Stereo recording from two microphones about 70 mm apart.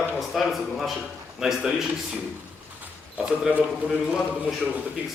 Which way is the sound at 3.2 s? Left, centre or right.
Centre.